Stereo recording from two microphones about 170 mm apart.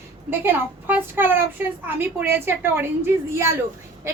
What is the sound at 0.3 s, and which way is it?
A woman's voice, 10° right (ahead or behind).